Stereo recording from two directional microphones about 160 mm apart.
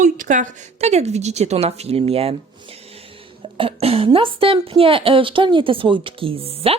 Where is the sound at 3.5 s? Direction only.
35° right (ahead or behind).